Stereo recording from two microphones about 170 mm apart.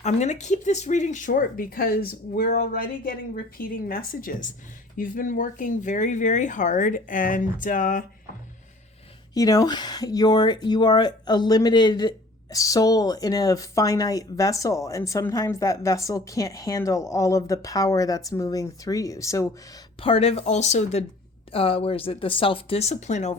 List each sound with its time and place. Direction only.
0.0 s speech: 45° left (ahead or behind)
9.3 s speech: 20° left (ahead or behind)
20.0 s speech: 35° left (ahead or behind)